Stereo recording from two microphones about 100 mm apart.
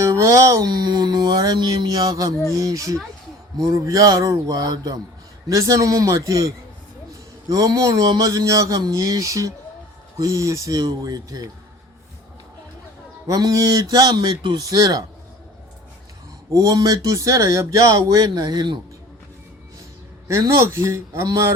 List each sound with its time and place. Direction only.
0.0 s a sound: 30° right (ahead or behind)
0.7 s speech: 45° right (ahead or behind)
7.5 s speech: 40° right (ahead or behind)
13.2 s speech: 35° right (ahead or behind)
16.5 s speech: 40° right (ahead or behind)
20.2 s a man's voice: 30° right (ahead or behind)